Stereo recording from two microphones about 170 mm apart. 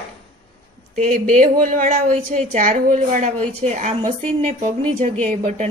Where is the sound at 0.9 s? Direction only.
45° right (ahead or behind).